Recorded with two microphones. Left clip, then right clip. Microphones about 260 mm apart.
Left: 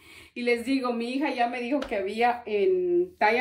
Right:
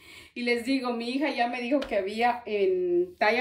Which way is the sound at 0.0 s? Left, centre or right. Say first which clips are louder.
Left 2 dB; centre.